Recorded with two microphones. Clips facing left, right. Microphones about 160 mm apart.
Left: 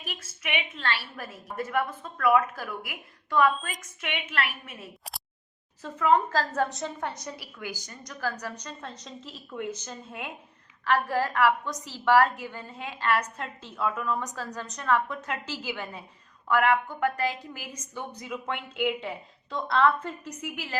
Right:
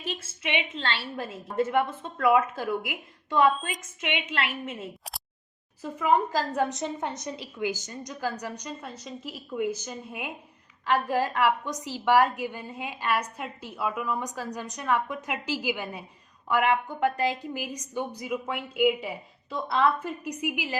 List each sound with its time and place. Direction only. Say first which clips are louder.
0.0 s a woman's voice: right 5 dB; 25° right (ahead or behind)
5.8 s a woman's voice: left 1 dB; 15° right (ahead or behind)